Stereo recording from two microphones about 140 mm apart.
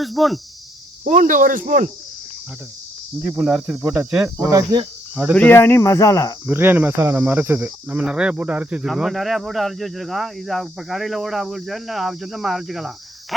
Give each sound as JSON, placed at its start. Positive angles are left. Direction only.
{"t": 0.0, "sound": "speech", "side_deg": 0}
{"t": 1.0, "sound": "speech", "side_deg": -65}
{"t": 3.2, "sound": "speech", "side_deg": -5}
{"t": 4.4, "sound": "cricket", "side_deg": -25}
{"t": 5.3, "sound": "speech", "side_deg": 10}
{"t": 6.4, "sound": "speech", "side_deg": -15}